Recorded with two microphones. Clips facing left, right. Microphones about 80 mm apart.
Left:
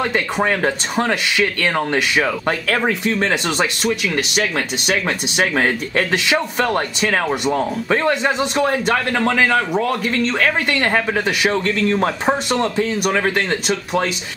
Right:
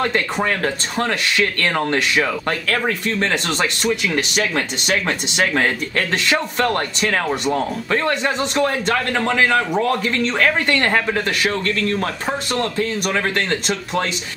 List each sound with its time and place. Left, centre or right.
0.0 s speech: centre
11.4 s speech: centre